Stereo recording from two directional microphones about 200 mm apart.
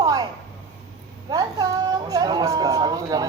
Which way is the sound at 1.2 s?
20° right (ahead or behind).